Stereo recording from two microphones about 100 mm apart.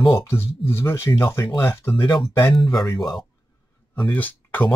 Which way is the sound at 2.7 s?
40° left (ahead or behind).